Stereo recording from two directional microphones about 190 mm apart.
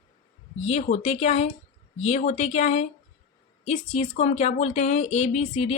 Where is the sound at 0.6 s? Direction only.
35° left (ahead or behind).